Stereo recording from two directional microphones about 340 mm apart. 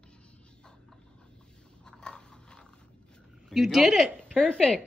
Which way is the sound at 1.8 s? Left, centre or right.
Centre.